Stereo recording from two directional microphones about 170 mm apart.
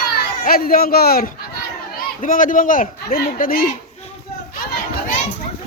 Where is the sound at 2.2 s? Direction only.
50° left (ahead or behind).